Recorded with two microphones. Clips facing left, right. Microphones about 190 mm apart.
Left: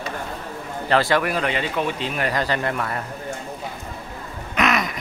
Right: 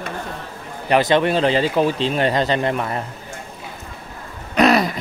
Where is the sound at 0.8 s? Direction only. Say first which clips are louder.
Right 4 dB; 20° right (ahead or behind).